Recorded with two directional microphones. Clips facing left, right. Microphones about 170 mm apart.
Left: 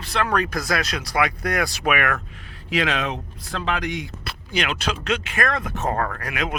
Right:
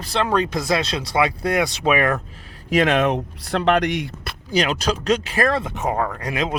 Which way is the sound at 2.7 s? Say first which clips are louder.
Right 6 dB; 50° right (ahead or behind).